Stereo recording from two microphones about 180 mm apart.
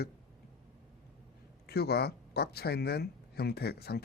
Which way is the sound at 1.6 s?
60° left (ahead or behind).